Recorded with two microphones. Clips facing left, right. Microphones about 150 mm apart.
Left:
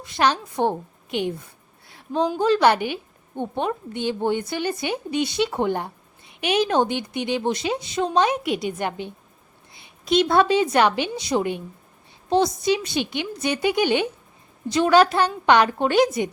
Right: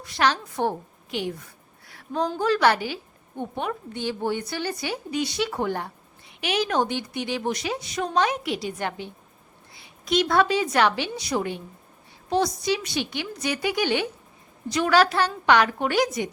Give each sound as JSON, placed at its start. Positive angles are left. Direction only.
{"t": 0.0, "sound": "a woman's voice", "side_deg": 20}
{"t": 1.9, "sound": "a sound", "side_deg": 25}
{"t": 2.4, "sound": "a woman's voice", "side_deg": 20}